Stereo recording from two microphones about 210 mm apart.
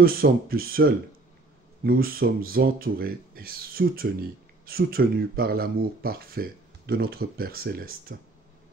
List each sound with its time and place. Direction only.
0.0 s speech: 45° right (ahead or behind)